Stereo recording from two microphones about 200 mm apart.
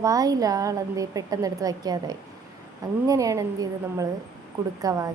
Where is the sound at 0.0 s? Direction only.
15° right (ahead or behind).